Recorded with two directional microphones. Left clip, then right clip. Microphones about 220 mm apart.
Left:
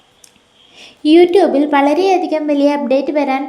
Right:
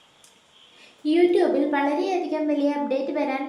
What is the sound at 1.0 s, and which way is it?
A woman's voice, 40° left (ahead or behind).